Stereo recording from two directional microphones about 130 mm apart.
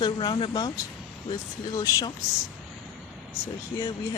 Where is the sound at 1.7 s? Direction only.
30° left (ahead or behind).